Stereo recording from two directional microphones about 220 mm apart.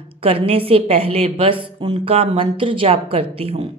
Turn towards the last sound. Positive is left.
turn(degrees=-25)  # may be behind; listen again after turning